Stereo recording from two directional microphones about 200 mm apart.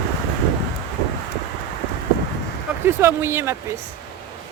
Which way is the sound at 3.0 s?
10° right (ahead or behind).